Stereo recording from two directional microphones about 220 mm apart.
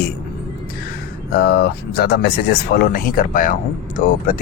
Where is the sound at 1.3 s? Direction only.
45° left (ahead or behind).